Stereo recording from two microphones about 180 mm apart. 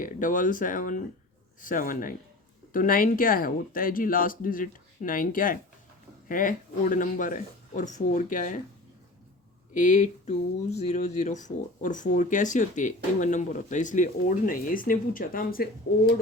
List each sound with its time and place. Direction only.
0.0 s speech: 45° left (ahead or behind)
9.7 s speech: 45° left (ahead or behind)